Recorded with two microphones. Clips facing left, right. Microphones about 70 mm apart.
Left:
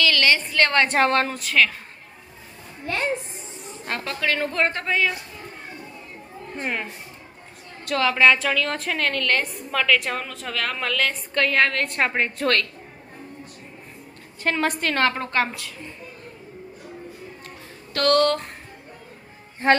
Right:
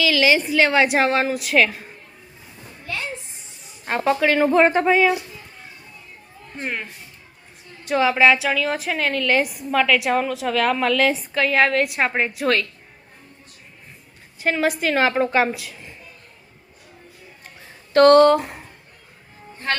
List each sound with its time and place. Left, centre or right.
0.0 s a woman's voice: centre
2.8 s music: left
3.8 s a woman's voice: centre
7.9 s a woman's voice: centre
14.4 s a woman's voice: centre
17.9 s speech: right
18.3 s speech: centre
19.6 s music: left